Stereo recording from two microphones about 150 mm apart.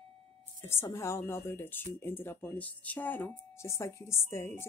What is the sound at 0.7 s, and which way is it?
Speech, 15° left (ahead or behind).